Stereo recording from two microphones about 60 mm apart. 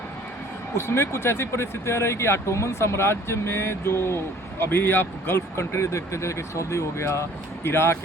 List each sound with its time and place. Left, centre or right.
0.7 s speech: left